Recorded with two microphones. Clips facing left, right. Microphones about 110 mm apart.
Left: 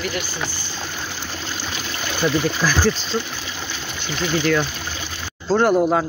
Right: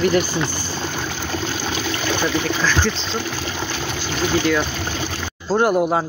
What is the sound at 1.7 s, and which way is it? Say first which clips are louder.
Water: right 6 dB; 90° right.